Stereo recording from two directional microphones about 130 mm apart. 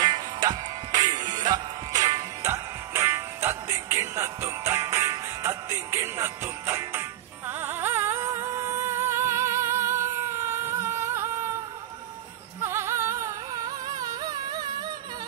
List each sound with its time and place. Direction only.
0.0 s music: 35° right (ahead or behind)
12.6 s music: 20° right (ahead or behind)